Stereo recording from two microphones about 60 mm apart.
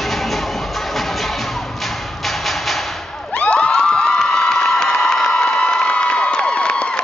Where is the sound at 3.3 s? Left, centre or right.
Left.